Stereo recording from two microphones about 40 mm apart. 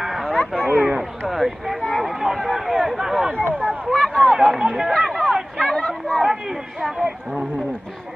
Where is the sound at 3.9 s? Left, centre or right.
Centre.